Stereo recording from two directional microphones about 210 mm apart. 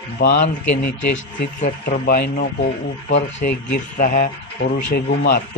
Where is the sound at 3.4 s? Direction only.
40° left (ahead or behind).